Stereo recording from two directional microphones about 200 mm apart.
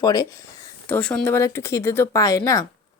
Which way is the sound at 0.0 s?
20° left (ahead or behind).